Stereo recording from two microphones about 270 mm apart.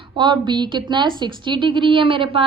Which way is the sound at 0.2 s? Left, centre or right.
Centre.